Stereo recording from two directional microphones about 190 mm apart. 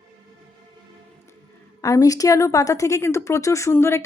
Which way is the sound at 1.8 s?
15° left (ahead or behind).